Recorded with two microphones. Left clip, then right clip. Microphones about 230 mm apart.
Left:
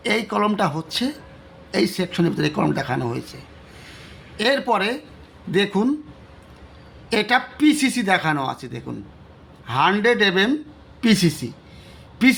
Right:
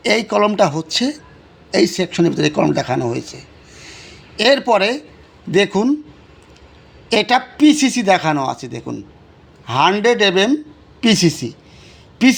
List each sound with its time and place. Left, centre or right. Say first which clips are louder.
0.0 s speech: right 6 dB; right
3.8 s a sound: right 6 dB; right
5.5 s speech: right 5 dB; right
7.1 s speech: right 4 dB; right